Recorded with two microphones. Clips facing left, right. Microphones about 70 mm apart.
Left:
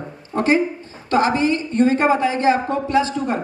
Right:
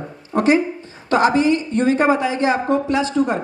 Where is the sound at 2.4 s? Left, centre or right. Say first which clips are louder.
Even; right.